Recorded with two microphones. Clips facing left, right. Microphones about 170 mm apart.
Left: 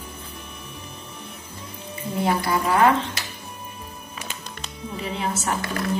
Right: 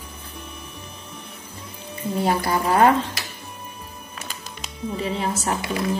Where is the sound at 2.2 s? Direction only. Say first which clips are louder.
Even; 40° right (ahead or behind).